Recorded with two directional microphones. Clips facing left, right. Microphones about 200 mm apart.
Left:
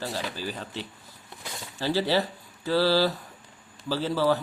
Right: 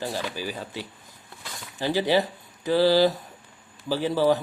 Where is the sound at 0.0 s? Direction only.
15° right (ahead or behind).